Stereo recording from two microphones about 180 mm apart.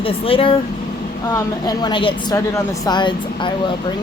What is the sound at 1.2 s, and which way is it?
Speech, 20° left (ahead or behind).